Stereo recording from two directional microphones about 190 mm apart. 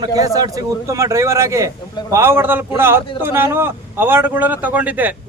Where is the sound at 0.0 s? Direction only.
20° right (ahead or behind).